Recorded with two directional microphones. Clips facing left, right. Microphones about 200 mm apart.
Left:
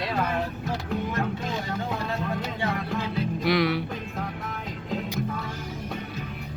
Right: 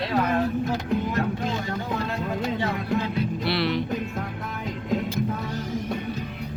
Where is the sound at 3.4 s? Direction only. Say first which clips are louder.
Left 3 dB; 10° left (ahead or behind).